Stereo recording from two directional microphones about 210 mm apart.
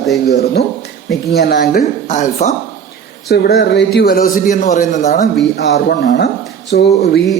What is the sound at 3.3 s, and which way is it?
Speech, 50° left (ahead or behind).